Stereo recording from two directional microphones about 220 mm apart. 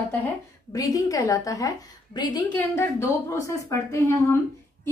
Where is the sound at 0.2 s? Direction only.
15° left (ahead or behind).